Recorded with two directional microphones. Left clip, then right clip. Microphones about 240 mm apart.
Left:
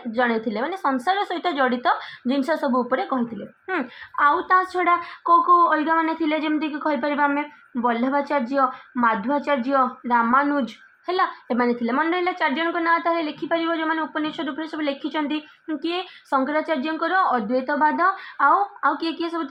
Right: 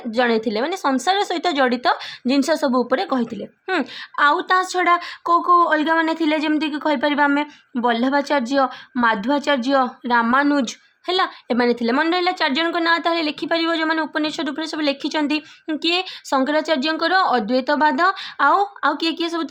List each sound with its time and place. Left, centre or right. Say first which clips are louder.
0.1 s a woman's voice: right 3 dB; right